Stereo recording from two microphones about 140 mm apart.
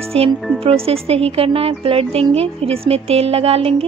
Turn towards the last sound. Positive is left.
turn(degrees=-45)  # may be behind; listen again after turning